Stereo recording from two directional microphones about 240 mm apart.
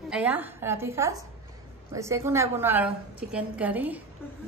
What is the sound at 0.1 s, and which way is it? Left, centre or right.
A woman's voice, centre.